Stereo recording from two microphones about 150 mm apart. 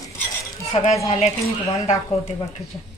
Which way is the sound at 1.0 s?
45° left (ahead or behind).